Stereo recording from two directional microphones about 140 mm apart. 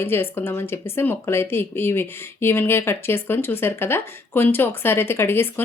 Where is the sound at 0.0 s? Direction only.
15° left (ahead or behind).